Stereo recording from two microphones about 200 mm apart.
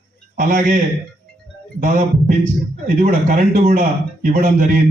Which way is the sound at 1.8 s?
40° right (ahead or behind).